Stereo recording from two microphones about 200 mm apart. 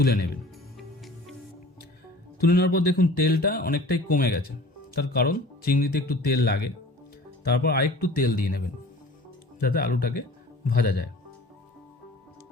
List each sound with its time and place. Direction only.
0.0 s speech: 50° left (ahead or behind)
0.8 s music: centre (ahead or behind)
2.4 s speech: 50° left (ahead or behind)